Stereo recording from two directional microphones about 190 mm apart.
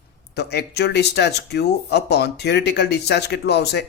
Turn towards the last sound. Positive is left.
turn(degrees=60)  # may be behind; listen again after turning